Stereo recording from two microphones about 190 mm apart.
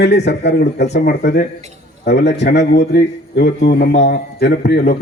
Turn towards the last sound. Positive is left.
turn(degrees=60)  # may be behind; listen again after turning